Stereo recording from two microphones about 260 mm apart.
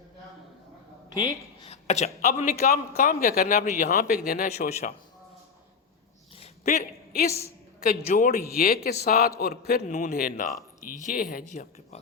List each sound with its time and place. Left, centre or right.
1.1 s a man's voice: centre
6.3 s a sound: left
8.0 s a man's voice: left